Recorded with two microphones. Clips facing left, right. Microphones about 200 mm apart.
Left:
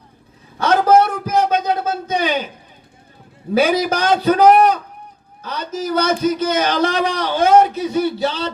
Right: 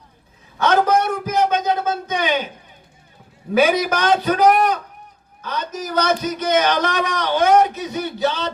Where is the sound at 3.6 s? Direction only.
30° left (ahead or behind).